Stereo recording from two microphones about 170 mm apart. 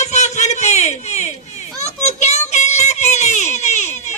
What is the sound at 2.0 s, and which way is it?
Child singing, 40° left (ahead or behind).